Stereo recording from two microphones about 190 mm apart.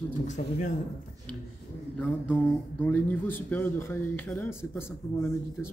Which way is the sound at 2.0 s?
5° left (ahead or behind).